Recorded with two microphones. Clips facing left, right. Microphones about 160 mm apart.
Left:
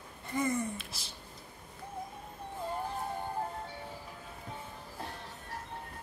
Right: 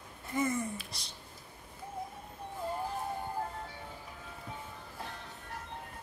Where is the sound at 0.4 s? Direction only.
Centre (ahead or behind).